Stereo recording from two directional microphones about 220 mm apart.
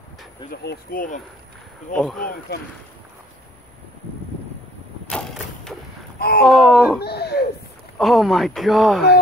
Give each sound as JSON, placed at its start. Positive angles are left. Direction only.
{"t": 0.5, "sound": "speech", "side_deg": 40}
{"t": 2.0, "sound": "speech", "side_deg": 5}
{"t": 5.1, "sound": "thump", "side_deg": 0}
{"t": 6.1, "sound": "a sound", "side_deg": 45}
{"t": 6.4, "sound": "speech", "side_deg": 0}
{"t": 7.0, "sound": "speech", "side_deg": 45}
{"t": 8.0, "sound": "speech", "side_deg": 0}